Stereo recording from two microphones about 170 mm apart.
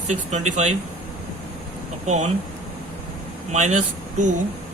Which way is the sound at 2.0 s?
40° right (ahead or behind).